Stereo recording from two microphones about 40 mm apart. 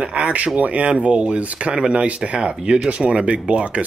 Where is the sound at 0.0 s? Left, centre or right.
Right; by 2.9 s centre.